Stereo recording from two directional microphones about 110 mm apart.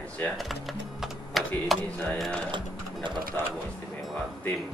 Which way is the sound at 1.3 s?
Centre (ahead or behind).